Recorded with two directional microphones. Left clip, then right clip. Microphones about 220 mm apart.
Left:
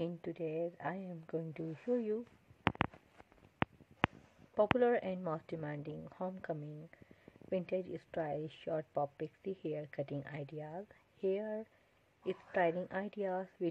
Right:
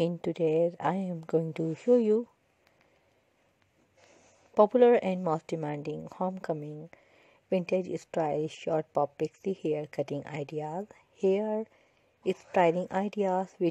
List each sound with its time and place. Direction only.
0.0 s speech: 40° right (ahead or behind)
4.6 s speech: 35° right (ahead or behind)